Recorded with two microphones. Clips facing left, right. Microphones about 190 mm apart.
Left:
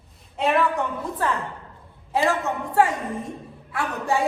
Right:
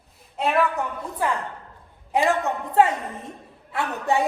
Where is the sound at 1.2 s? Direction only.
15° right (ahead or behind).